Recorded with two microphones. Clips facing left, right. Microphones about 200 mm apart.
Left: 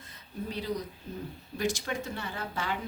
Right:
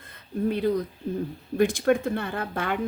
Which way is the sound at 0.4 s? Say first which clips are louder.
Right 10 dB; 55° right (ahead or behind).